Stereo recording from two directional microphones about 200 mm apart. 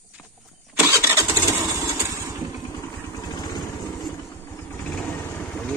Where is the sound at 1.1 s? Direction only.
10° right (ahead or behind).